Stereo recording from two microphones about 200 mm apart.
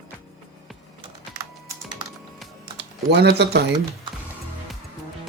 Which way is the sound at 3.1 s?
55° right (ahead or behind).